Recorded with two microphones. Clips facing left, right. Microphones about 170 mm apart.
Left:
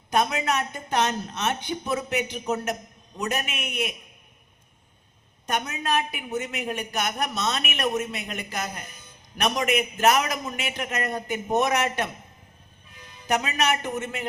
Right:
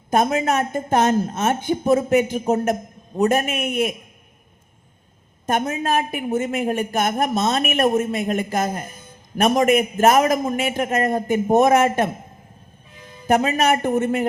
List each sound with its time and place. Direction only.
0.1 s a man's voice: 50° right (ahead or behind)
5.5 s a man's voice: 50° right (ahead or behind)
13.2 s a man's voice: 50° right (ahead or behind)